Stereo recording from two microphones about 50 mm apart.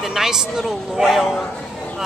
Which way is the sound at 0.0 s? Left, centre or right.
Centre.